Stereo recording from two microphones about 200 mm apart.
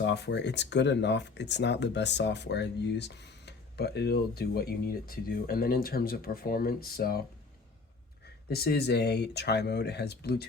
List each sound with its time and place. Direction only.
0.0 s speech: 60° left (ahead or behind)
8.4 s speech: 50° left (ahead or behind)